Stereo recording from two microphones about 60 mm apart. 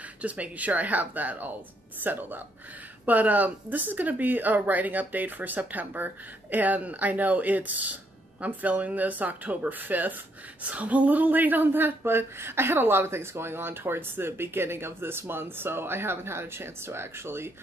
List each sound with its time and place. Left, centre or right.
0.2 s speech: right